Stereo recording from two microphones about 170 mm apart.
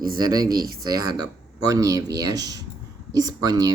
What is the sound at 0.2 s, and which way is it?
Speech, 25° right (ahead or behind).